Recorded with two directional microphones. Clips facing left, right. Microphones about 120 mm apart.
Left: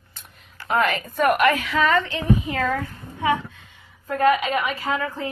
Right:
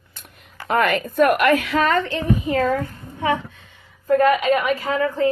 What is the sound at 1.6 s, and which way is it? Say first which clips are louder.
A woman's voice: right 1 dB; 45° right (ahead or behind).